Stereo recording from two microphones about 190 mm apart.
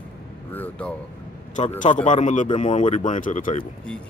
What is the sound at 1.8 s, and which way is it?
Speech, 40° left (ahead or behind).